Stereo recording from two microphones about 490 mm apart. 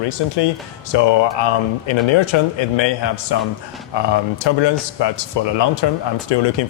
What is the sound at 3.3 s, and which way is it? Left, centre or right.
A man's voice, left.